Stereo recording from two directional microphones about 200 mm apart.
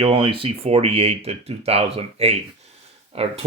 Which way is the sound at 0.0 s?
25° right (ahead or behind).